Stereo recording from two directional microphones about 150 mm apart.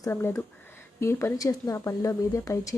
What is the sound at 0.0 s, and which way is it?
Speech, 15° left (ahead or behind).